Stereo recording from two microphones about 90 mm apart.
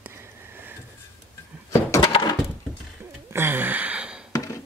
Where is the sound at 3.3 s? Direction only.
25° right (ahead or behind).